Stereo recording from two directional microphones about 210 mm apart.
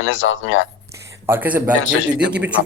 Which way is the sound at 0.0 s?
70° left (ahead or behind).